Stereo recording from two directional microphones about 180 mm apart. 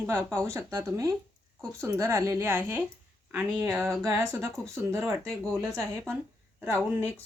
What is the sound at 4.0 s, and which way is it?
Speech, 15° right (ahead or behind).